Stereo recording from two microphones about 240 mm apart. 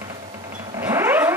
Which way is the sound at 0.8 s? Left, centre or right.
Centre.